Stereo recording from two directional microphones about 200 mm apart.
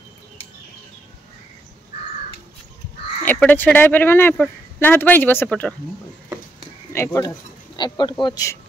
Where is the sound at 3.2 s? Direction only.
10° left (ahead or behind).